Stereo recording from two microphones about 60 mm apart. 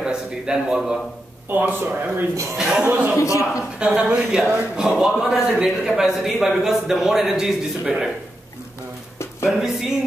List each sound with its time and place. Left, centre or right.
0.0 s a sound: centre
1.5 s speech: right
2.5 s speech: centre
2.8 s speech: right
3.2 s a man's voice: left
3.8 s speech: centre
4.9 s speech: centre
9.5 s speech: centre